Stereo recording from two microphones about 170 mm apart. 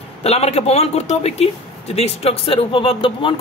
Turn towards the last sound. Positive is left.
turn(degrees=30)  # may be behind; listen again after turning